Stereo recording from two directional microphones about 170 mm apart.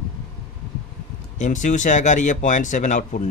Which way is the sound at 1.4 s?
45° left (ahead or behind).